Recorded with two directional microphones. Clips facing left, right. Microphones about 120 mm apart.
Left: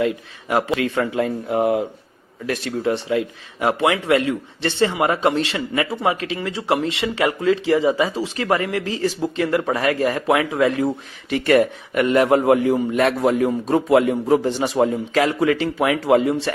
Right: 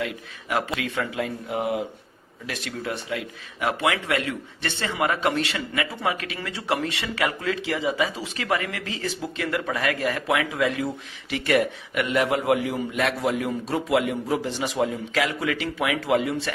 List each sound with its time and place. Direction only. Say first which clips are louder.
0.0 s speech: left 9 dB; 30° left (ahead or behind)
0.8 s speech: left 7 dB; 40° left (ahead or behind)
2.5 s speech: left 9 dB; 30° left (ahead or behind)